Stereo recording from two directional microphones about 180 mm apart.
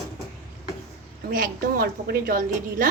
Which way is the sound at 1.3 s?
50° right (ahead or behind).